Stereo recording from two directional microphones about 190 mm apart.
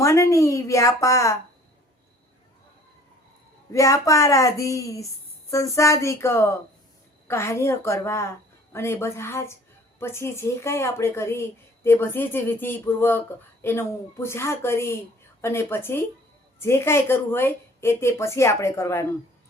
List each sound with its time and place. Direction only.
0.0 s a woman's voice: 15° left (ahead or behind)
3.7 s a woman's voice: 15° left (ahead or behind)